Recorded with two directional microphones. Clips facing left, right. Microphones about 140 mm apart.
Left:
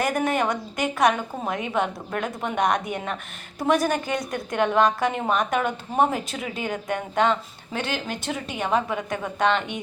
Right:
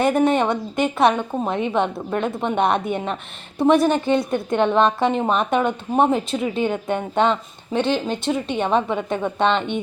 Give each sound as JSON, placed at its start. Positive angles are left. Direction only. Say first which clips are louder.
{"t": 0.0, "sound": "a woman's voice", "louder": "right 6 dB", "side_deg": -25}